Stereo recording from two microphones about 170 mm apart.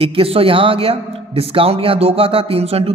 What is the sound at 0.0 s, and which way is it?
A man's voice, 35° right (ahead or behind).